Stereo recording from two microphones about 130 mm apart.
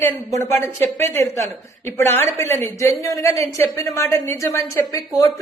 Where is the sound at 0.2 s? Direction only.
25° left (ahead or behind).